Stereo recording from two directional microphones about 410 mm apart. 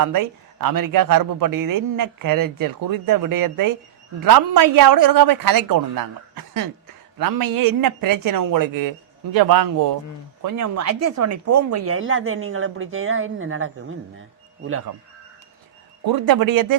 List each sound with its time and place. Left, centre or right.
0.0 s speech: right
10.4 s speech: right
16.0 s speech: right